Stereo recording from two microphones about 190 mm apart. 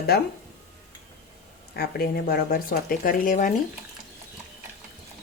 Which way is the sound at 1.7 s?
55° left (ahead or behind).